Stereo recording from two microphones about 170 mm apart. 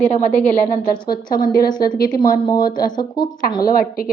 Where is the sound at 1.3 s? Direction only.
60° left (ahead or behind).